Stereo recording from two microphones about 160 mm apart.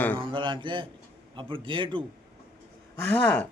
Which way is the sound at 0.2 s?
30° right (ahead or behind).